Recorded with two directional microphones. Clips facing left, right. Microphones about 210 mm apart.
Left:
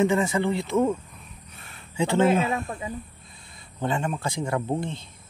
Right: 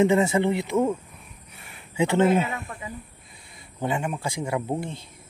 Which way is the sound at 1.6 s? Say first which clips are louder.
Right 2 dB; 15° right (ahead or behind).